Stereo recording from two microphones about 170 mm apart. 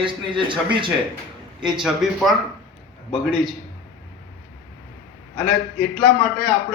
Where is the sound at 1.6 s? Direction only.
5° right (ahead or behind).